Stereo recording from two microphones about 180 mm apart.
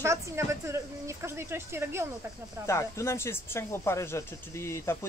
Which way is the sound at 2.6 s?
15° left (ahead or behind).